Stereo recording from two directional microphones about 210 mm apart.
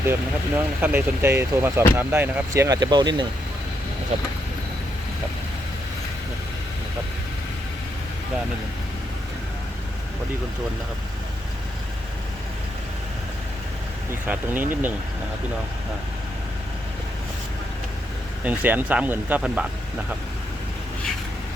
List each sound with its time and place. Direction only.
0.0 s speech: 10° right (ahead or behind)
14.1 s speech: 10° right (ahead or behind)
18.4 s speech: 10° right (ahead or behind)